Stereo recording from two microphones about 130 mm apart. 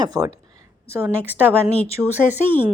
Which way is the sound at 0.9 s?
15° right (ahead or behind).